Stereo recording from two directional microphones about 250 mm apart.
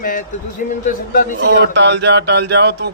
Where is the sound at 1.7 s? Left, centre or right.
Right.